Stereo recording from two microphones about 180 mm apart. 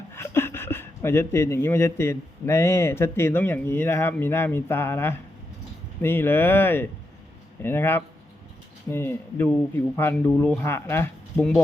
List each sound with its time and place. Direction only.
0.1 s speech: 15° left (ahead or behind)